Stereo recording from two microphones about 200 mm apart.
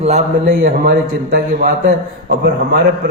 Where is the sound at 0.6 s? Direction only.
45° right (ahead or behind).